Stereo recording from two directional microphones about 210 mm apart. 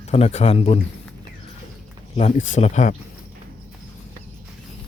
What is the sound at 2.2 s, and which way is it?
Speech, 35° left (ahead or behind).